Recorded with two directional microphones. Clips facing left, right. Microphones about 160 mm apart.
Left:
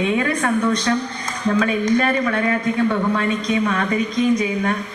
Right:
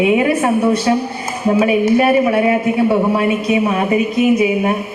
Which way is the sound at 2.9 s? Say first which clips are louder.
Right 6 dB; 35° right (ahead or behind).